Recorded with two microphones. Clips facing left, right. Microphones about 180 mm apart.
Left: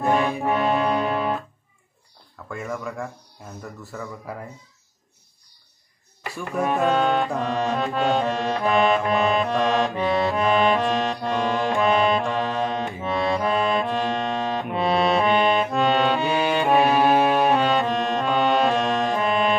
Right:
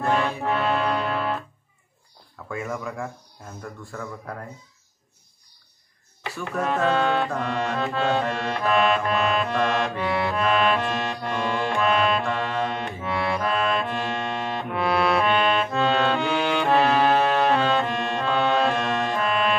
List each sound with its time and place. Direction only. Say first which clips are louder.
0.0 s music: left 2 dB; 15° left (ahead or behind)
2.5 s speech: even; centre (ahead or behind)
6.2 s music: left 2 dB; 10° left (ahead or behind)